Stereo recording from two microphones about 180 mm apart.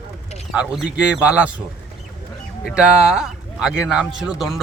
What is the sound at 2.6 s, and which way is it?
Speech, 5° right (ahead or behind).